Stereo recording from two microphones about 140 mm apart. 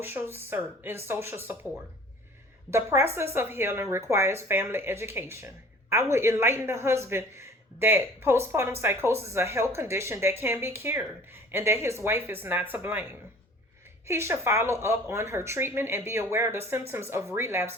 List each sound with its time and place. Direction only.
0.0 s a woman's voice: 15° right (ahead or behind)
2.6 s a woman's voice: 20° right (ahead or behind)
14.1 s speech: 20° right (ahead or behind)